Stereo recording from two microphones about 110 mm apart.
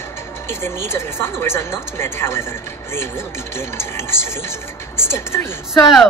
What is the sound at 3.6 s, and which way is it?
Speech, 20° left (ahead or behind).